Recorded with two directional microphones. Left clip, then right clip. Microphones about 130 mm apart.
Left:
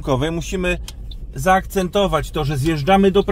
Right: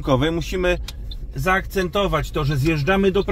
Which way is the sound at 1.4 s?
55° left (ahead or behind).